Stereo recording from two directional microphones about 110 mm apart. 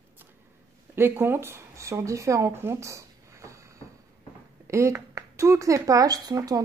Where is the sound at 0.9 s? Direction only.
20° right (ahead or behind).